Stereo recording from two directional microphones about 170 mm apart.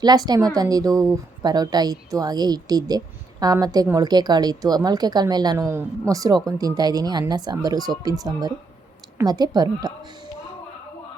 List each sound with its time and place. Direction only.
0.0 s a woman's voice: 25° right (ahead or behind)